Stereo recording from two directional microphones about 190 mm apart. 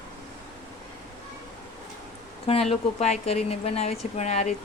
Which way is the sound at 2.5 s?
30° left (ahead or behind).